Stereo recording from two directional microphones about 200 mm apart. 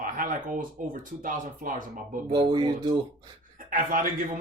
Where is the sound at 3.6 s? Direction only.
45° right (ahead or behind).